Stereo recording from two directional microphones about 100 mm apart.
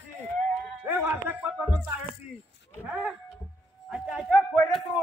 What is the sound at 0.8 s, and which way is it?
Music, 20° right (ahead or behind).